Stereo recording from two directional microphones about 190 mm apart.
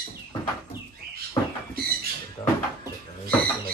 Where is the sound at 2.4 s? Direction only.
15° left (ahead or behind).